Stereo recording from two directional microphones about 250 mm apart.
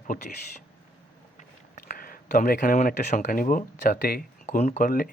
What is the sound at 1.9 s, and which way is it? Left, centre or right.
Speech, left.